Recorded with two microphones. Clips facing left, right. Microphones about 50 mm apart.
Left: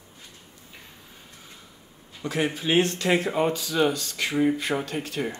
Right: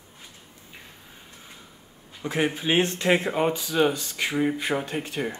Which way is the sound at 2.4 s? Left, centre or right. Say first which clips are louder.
Left 1 dB; right.